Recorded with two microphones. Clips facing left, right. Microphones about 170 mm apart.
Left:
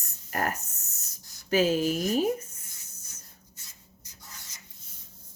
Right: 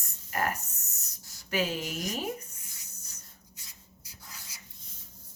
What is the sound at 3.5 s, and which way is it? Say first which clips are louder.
Rub: even; 10° right (ahead or behind).